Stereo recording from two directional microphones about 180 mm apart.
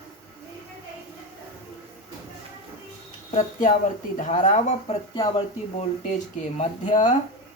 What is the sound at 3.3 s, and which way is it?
Speech, 50° left (ahead or behind).